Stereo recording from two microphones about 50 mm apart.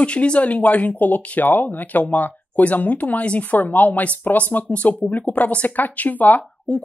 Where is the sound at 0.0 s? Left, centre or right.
Left.